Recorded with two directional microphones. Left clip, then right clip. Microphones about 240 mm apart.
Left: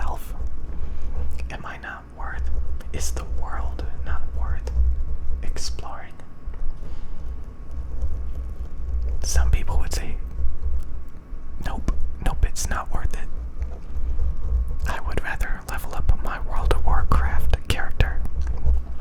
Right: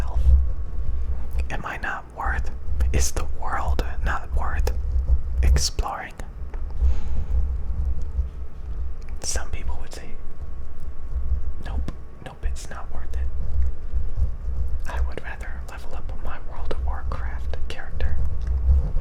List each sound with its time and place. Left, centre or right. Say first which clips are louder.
1.4 s whispering: right 5 dB; centre
9.2 s whispering: even; centre
9.5 s whispering: left 7 dB; centre
11.6 s whispering: left 6 dB; centre
14.8 s whispering: left 6 dB; centre